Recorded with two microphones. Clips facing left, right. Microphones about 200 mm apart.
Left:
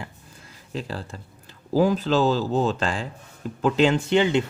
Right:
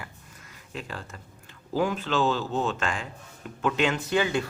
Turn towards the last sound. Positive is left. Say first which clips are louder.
# left 5 dB
turn(degrees=25)  # may be behind; listen again after turning